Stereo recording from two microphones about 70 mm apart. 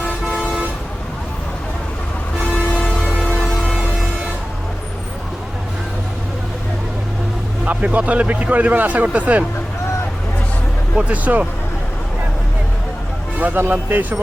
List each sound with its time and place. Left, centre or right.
0.3 s vehicle: centre
2.4 s vehicle: left
3.0 s music: centre
7.6 s a man's voice: centre
10.9 s a man's voice: right
13.4 s a man's voice: right